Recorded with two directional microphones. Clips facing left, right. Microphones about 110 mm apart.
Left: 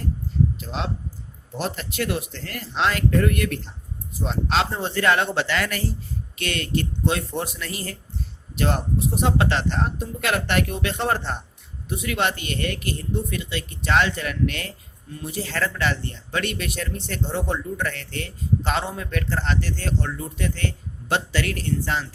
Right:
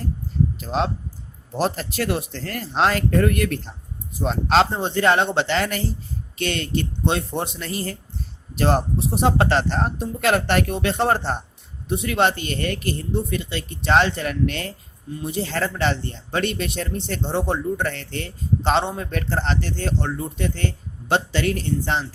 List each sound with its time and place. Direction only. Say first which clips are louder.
0.6 s speech: right 6 dB; 40° right (ahead or behind)
4.7 s speech: right 2 dB; 20° right (ahead or behind)